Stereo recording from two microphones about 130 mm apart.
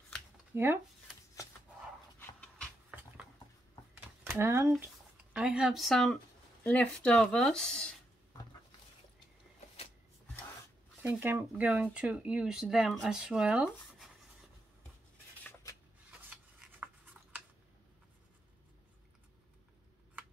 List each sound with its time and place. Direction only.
0.5 s speech: 20° right (ahead or behind)
4.3 s speech: 20° right (ahead or behind); by 6.1 s centre (ahead or behind)
6.6 s speech: 10° left (ahead or behind)
11.0 s speech: 15° right (ahead or behind)
16.1 s rub: 10° right (ahead or behind)